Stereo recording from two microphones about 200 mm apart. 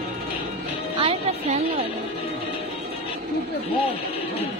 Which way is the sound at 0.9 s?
25° right (ahead or behind).